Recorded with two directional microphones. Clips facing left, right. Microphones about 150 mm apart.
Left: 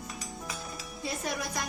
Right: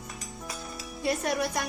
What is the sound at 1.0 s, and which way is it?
Speech, 65° right (ahead or behind).